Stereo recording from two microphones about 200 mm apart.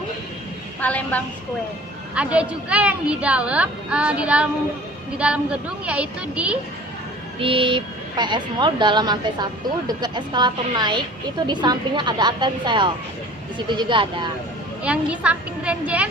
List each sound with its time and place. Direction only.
0.8 s a woman's voice: 5° left (ahead or behind)
2.1 s a woman's voice: 5° right (ahead or behind)
7.3 s speech: 25° right (ahead or behind)
14.8 s a woman's voice: 5° right (ahead or behind)